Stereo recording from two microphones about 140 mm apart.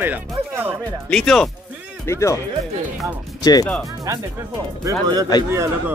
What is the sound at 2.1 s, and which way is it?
Speech, 20° left (ahead or behind).